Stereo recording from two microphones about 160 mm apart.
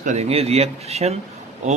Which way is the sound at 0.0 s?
45° right (ahead or behind).